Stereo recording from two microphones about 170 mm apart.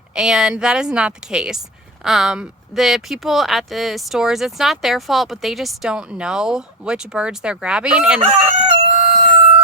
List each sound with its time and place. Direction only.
0.1 s speech: 5° right (ahead or behind)
8.2 s crowing: 35° right (ahead or behind)